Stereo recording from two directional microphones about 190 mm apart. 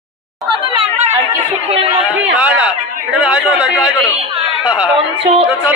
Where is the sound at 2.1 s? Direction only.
5° right (ahead or behind).